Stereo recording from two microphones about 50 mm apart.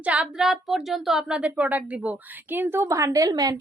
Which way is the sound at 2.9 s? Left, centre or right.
Right.